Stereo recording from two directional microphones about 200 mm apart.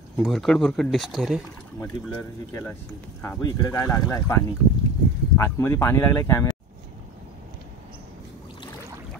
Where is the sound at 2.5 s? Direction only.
10° left (ahead or behind).